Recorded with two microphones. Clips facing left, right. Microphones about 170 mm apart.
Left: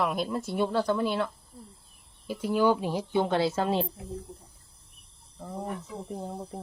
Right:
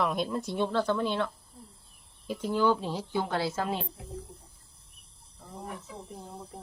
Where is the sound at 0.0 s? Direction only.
Centre (ahead or behind); by 3.8 s 30° left (ahead or behind).